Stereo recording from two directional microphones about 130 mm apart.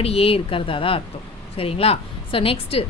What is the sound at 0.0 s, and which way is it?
A woman's voice, 50° left (ahead or behind).